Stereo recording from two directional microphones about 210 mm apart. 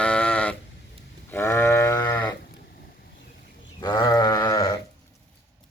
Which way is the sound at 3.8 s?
20° left (ahead or behind).